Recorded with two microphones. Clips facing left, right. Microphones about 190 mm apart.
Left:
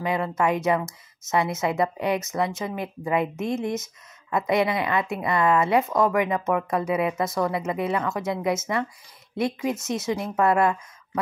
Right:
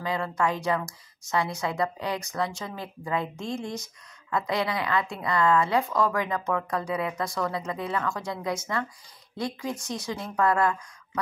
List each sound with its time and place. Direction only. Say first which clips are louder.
0.0 s a woman's voice: left 3 dB; 20° left (ahead or behind)